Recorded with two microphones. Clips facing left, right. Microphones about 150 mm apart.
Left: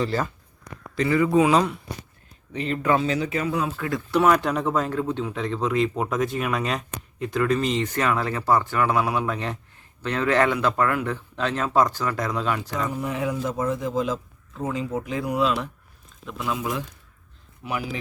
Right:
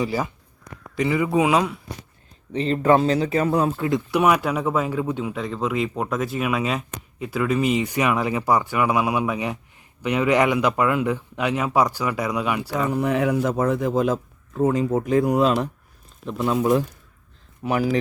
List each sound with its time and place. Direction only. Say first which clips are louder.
0.0 s speech: right 1 dB; 10° right (ahead or behind)
2.5 s speech: right 5 dB; 30° right (ahead or behind)
3.8 s speech: right 2 dB; 20° right (ahead or behind)
12.9 s speech: right 9 dB; 70° right (ahead or behind); by 17.9 s 45° right (ahead or behind)